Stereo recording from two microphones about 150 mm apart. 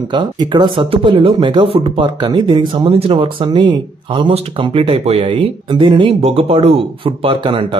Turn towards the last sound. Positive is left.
turn(degrees=-35)  # may be behind; listen again after turning